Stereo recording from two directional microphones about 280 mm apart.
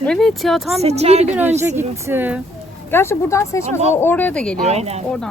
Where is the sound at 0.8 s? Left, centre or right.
Right.